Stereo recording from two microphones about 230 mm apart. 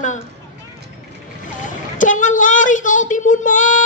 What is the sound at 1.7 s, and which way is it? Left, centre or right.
Speech, left.